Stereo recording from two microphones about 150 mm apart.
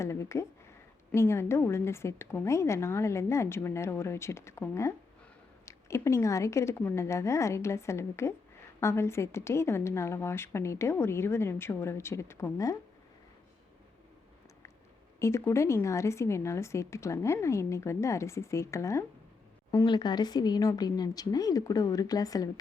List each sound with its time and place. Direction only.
0.0 s a woman's voice: 20° left (ahead or behind)
15.2 s a woman's voice: 20° left (ahead or behind)